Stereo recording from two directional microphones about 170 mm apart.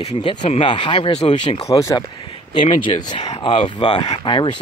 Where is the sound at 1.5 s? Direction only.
20° left (ahead or behind).